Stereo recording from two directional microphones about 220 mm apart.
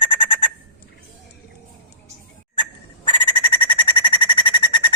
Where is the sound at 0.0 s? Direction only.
25° left (ahead or behind).